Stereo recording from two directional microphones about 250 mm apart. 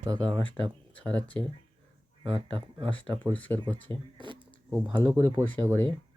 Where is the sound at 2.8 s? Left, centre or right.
Centre.